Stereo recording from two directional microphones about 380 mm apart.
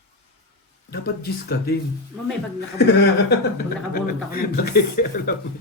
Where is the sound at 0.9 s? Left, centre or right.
Left.